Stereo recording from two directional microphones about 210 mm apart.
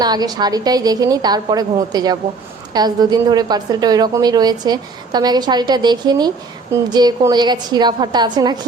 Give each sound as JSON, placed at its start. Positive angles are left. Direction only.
{"t": 0.0, "sound": "a woman's voice", "side_deg": -20}